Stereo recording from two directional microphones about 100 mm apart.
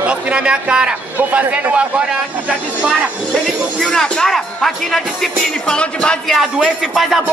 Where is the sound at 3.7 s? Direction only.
10° left (ahead or behind).